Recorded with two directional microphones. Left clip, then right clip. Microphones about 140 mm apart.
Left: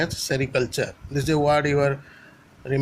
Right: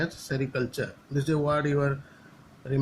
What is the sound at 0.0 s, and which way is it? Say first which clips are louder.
Speech: left 6 dB; 40° left (ahead or behind).